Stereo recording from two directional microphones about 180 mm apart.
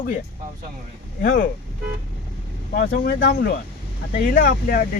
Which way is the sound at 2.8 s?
60° left (ahead or behind).